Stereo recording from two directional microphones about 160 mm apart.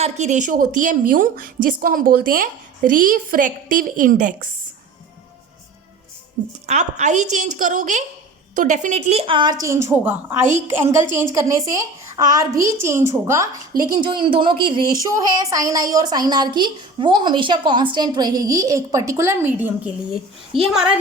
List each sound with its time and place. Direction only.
0.0 s a woman's voice: 45° right (ahead or behind)
6.7 s a woman's voice: 45° right (ahead or behind); by 13.8 s 20° right (ahead or behind)
14.0 s speech: 30° right (ahead or behind); by 19.9 s 15° right (ahead or behind)
20.5 s a woman's voice: 35° right (ahead or behind)